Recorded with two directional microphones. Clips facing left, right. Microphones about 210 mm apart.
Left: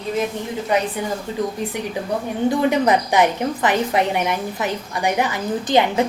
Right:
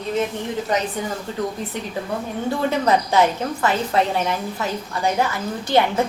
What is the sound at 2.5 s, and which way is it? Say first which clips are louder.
A woman's voice: left 3 dB; 15° left (ahead or behind).